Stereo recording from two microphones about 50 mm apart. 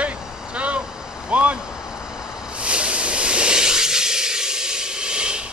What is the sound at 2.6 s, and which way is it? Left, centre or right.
Hiss, right.